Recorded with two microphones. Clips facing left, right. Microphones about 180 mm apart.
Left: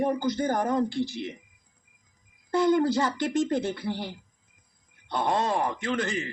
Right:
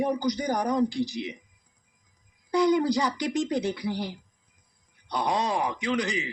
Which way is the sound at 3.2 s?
Centre (ahead or behind).